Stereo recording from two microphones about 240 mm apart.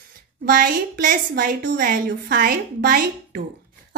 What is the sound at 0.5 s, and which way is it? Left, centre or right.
A woman's voice, right.